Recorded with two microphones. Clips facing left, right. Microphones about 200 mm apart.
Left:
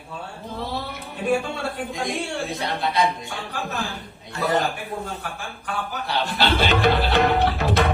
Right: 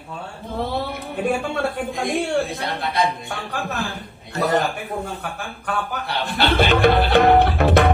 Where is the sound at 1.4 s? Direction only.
55° right (ahead or behind).